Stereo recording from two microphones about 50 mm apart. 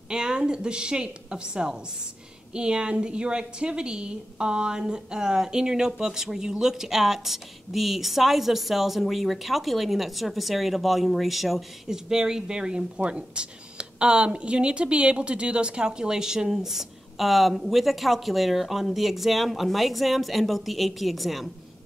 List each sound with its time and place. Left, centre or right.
0.1 s a woman's voice: centre